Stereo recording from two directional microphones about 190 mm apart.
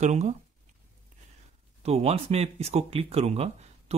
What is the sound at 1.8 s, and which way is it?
Speech, 35° right (ahead or behind).